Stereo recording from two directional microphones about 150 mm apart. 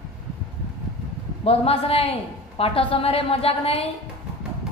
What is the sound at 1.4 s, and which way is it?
A woman's voice, 40° left (ahead or behind).